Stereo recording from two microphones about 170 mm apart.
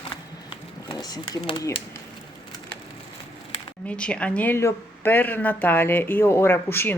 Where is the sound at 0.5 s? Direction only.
25° left (ahead or behind).